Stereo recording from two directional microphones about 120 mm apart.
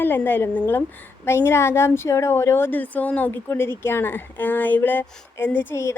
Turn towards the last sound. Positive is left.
turn(degrees=20)  # may be behind; listen again after turning